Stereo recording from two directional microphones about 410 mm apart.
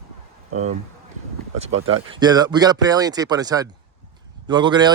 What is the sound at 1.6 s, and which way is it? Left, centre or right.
Speech, right.